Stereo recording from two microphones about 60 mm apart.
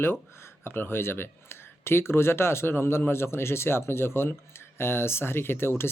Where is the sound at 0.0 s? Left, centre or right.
Left.